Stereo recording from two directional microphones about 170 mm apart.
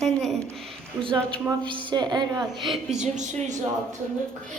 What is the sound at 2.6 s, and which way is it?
Speech, centre (ahead or behind).